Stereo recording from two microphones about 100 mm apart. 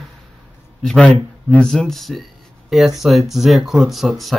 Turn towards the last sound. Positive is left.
turn(degrees=0)  # may be behind; listen again after turning